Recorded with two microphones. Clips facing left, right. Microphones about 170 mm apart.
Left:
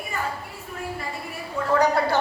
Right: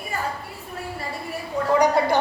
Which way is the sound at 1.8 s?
15° right (ahead or behind).